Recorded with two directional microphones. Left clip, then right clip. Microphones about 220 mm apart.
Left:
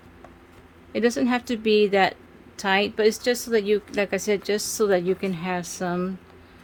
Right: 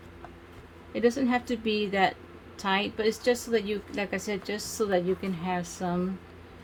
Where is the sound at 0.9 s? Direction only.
55° left (ahead or behind).